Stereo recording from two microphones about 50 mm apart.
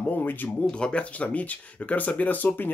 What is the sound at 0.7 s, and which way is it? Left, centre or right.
Speech, left.